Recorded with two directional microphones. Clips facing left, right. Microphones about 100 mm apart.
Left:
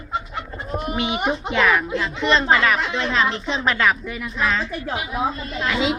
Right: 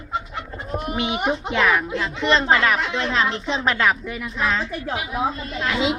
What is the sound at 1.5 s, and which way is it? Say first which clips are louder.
A woman's voice: left 2 dB; 25° right (ahead or behind).